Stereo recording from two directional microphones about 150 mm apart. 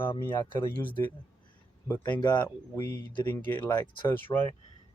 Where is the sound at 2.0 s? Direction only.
30° left (ahead or behind).